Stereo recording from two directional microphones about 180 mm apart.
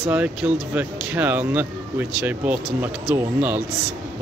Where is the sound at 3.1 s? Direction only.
10° right (ahead or behind).